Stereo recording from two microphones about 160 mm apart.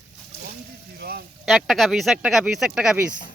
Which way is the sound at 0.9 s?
85° right.